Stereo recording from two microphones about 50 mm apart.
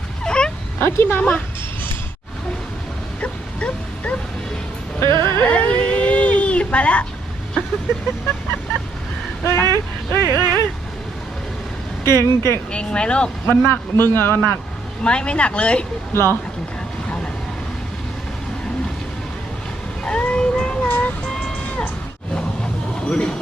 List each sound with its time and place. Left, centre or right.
0.3 s a sound: centre
0.8 s speech: left
3.2 s dog: left
4.9 s music: left
5.5 s a sound: left
9.4 s a sound: left
12.0 s speech: left
12.7 s speech: left
13.5 s a man's voice: left
15.0 s speech: left
16.1 s speech: left
20.1 s vehicle: left
20.8 s music: left
23.0 s speech: left